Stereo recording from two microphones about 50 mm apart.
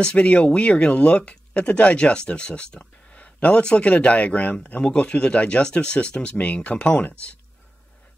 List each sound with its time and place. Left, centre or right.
0.0 s speech: left